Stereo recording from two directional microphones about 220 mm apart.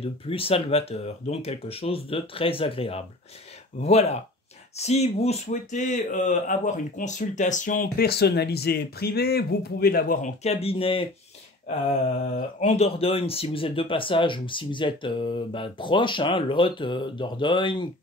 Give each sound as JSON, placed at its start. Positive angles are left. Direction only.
{"t": 0.0, "sound": "speech", "side_deg": 25}
{"t": 12.2, "sound": "speech", "side_deg": 35}